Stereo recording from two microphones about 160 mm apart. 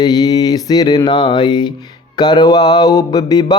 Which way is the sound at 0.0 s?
25° left (ahead or behind).